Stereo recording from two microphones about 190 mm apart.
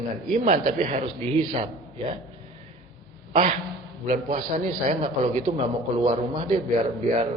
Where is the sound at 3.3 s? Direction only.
40° right (ahead or behind).